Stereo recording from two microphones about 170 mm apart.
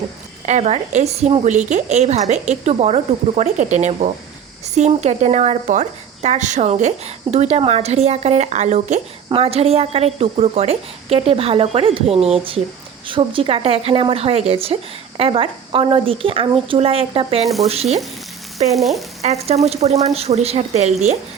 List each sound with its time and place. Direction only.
0.4 s speech: 40° right (ahead or behind)
17.4 s frying: centre (ahead or behind)
18.7 s frying: centre (ahead or behind)
19.2 s speech: 40° right (ahead or behind)